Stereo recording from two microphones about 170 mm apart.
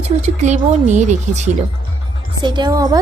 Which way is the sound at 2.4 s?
25° right (ahead or behind).